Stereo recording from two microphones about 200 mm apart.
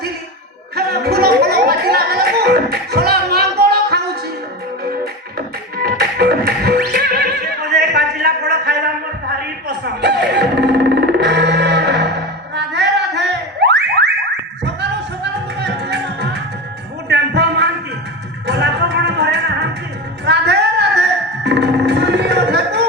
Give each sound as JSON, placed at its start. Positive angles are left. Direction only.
{"t": 0.8, "sound": "music", "side_deg": -50}
{"t": 5.7, "sound": "music", "side_deg": -55}
{"t": 12.5, "sound": "a sound", "side_deg": -60}
{"t": 14.6, "sound": "music", "side_deg": -60}
{"t": 17.1, "sound": "a sound", "side_deg": -60}
{"t": 18.4, "sound": "music", "side_deg": -60}